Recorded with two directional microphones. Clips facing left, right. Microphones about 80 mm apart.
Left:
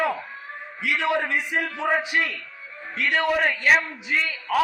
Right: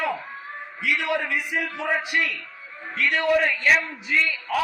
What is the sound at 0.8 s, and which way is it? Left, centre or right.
A man's voice, left.